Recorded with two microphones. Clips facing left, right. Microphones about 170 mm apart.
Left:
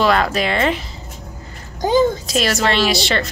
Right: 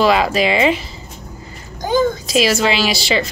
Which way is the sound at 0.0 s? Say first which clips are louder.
Right 2 dB; centre (ahead or behind).